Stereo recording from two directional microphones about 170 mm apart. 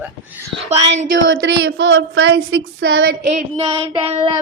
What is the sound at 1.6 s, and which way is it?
Speech, 90° right.